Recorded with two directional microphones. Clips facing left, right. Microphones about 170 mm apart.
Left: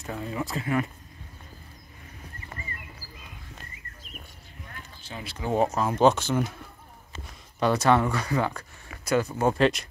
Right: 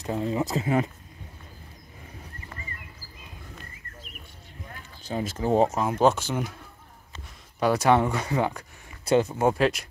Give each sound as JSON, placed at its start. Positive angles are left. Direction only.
{"t": 0.0, "sound": "speech", "side_deg": -25}
{"t": 5.0, "sound": "speech", "side_deg": -40}
{"t": 5.8, "sound": "speech", "side_deg": -15}
{"t": 7.6, "sound": "speech", "side_deg": -10}
{"t": 9.6, "sound": "speech", "side_deg": -5}